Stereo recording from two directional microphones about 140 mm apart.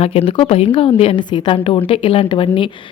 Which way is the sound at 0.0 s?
45° left (ahead or behind).